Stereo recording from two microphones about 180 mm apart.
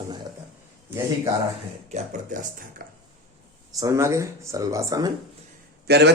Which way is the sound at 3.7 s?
20° right (ahead or behind).